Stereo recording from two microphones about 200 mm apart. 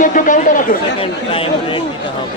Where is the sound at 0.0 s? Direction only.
40° left (ahead or behind).